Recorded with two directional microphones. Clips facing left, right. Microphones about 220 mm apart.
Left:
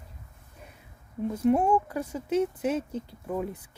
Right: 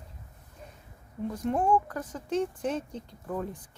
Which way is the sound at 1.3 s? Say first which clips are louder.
Left 4 dB; 10° left (ahead or behind).